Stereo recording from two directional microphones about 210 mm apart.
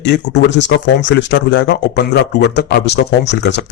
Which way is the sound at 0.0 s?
55° left (ahead or behind).